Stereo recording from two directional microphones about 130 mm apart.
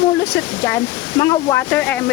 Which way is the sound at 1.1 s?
30° left (ahead or behind).